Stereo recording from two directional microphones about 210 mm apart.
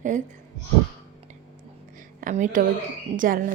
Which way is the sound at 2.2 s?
40° right (ahead or behind).